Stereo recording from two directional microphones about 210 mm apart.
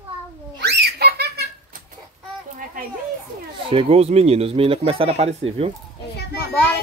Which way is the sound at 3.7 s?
25° right (ahead or behind).